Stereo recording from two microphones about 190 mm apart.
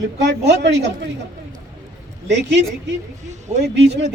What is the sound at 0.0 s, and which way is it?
A man's voice, 70° right (ahead or behind).